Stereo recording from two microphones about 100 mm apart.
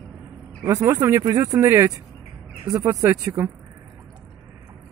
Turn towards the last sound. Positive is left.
turn(degrees=-30)  # may be behind; listen again after turning